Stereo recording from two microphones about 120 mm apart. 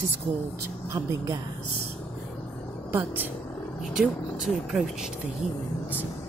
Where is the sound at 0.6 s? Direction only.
25° right (ahead or behind).